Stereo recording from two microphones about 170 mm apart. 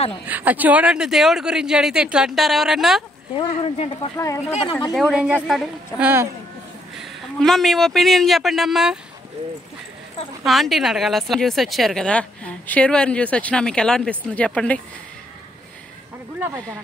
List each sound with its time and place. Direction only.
0.3 s speech: 10° right (ahead or behind)
3.3 s speech: 40° left (ahead or behind)
4.9 s speech: centre (ahead or behind)
7.0 s speech: centre (ahead or behind)
10.4 s speech: centre (ahead or behind)
16.3 s speech: 20° right (ahead or behind)